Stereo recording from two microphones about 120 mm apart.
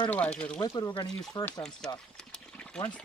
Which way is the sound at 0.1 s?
10° left (ahead or behind).